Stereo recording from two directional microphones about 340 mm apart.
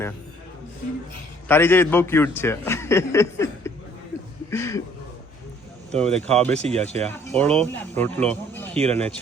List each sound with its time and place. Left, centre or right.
1.5 s a man's voice: centre
5.9 s speech: centre
6.5 s speech: centre
7.3 s speech: centre